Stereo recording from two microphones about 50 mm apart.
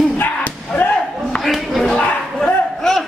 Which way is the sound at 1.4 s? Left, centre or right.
Centre.